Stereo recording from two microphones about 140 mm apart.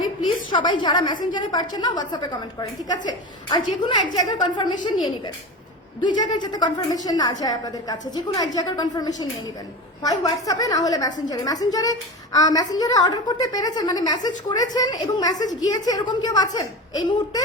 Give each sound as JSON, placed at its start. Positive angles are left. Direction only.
{"t": 0.5, "sound": "a woman's voice", "side_deg": 35}
{"t": 6.0, "sound": "a woman's voice", "side_deg": 30}